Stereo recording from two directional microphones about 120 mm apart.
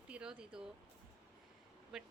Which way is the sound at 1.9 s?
5° right (ahead or behind).